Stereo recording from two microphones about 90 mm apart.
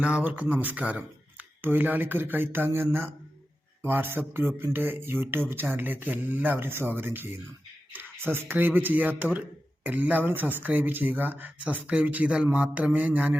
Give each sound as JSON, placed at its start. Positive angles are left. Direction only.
{"t": 0.0, "sound": "mantra", "side_deg": -15}
{"t": 0.5, "sound": "speech", "side_deg": -20}
{"t": 12.5, "sound": "mantra", "side_deg": -15}